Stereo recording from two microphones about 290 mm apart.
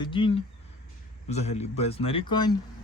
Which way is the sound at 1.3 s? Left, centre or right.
Left.